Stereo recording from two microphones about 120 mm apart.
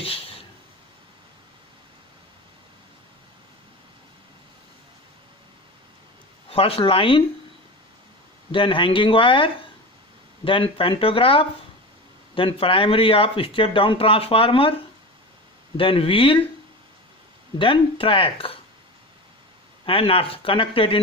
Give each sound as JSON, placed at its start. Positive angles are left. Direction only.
{"t": 0.0, "sound": "a sound", "side_deg": 50}
{"t": 6.5, "sound": "speech", "side_deg": 50}
{"t": 8.5, "sound": "speech", "side_deg": 45}
{"t": 15.8, "sound": "speech", "side_deg": 50}
{"t": 17.6, "sound": "speech", "side_deg": 45}
{"t": 19.8, "sound": "speech", "side_deg": 50}